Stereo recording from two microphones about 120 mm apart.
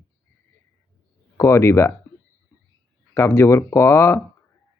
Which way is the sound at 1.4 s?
25° left (ahead or behind).